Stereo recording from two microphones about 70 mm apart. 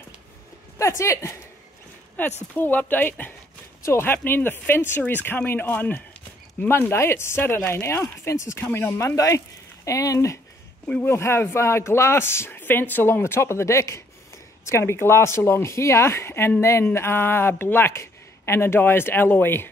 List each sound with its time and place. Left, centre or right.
0.7 s speech: left
2.1 s speech: left
8.5 s speech: left
8.9 s speech: left
11.0 s speech: left